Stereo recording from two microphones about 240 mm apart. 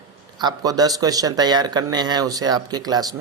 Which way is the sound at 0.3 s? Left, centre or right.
Centre.